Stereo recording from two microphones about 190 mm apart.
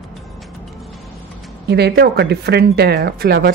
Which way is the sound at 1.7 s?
60° right (ahead or behind).